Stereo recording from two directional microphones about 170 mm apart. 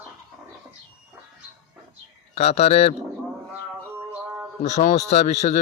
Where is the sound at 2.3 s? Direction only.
40° left (ahead or behind).